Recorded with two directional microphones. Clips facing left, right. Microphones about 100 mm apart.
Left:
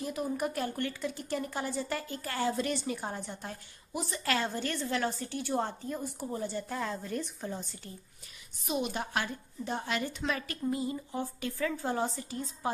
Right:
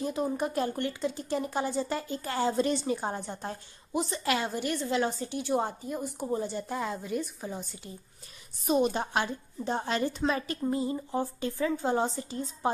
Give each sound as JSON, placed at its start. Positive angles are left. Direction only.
{"t": 0.0, "sound": "speech", "side_deg": -25}
{"t": 8.6, "sound": "speech", "side_deg": -35}